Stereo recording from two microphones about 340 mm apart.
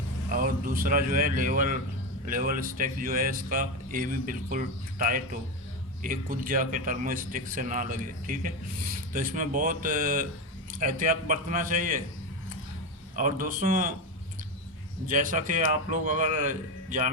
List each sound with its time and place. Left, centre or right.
0.3 s speech: right
13.1 s speech: right
15.0 s speech: right